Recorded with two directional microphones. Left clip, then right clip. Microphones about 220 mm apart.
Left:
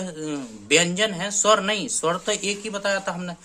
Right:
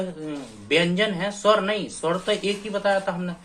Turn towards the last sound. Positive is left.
turn(degrees=40)  # may be behind; listen again after turning